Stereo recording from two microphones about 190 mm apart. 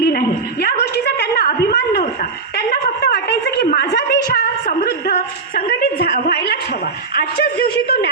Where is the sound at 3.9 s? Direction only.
55° left (ahead or behind).